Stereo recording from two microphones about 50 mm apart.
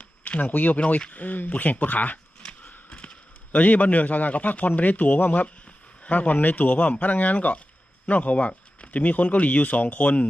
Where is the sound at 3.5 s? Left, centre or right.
Left.